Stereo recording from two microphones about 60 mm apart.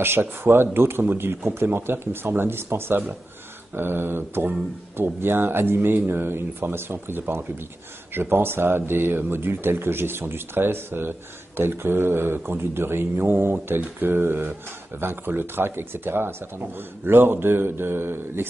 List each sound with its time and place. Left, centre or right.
0.0 s speech: right